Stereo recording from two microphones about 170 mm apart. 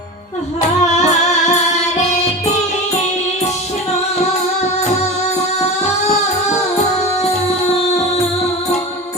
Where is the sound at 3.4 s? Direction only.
40° left (ahead or behind).